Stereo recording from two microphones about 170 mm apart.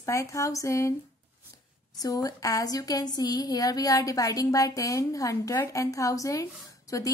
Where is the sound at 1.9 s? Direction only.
20° left (ahead or behind).